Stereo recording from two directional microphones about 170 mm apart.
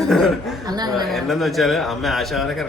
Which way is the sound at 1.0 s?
Centre (ahead or behind).